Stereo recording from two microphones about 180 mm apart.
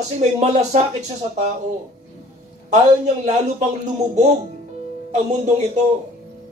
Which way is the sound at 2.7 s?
40° right (ahead or behind).